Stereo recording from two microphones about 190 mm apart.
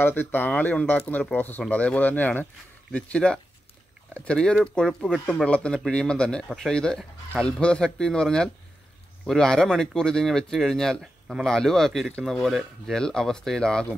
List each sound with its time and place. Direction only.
0.0 s speech: 10° left (ahead or behind)